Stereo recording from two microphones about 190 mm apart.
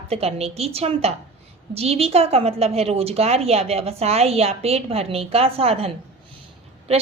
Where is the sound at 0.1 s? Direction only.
35° right (ahead or behind).